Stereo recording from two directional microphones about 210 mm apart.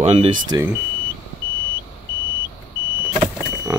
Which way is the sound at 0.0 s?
30° right (ahead or behind).